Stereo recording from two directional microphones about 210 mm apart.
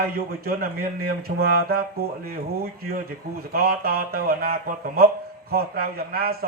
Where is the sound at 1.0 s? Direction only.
45° right (ahead or behind).